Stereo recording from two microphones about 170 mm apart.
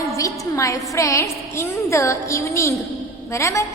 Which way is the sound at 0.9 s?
15° left (ahead or behind).